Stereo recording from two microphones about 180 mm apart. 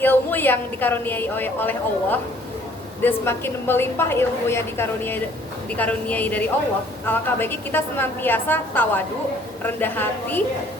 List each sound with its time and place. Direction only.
0.0 s a woman's voice: 10° left (ahead or behind)